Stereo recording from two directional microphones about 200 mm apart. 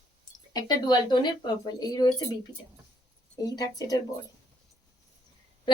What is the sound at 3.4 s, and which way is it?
Speech, 20° left (ahead or behind).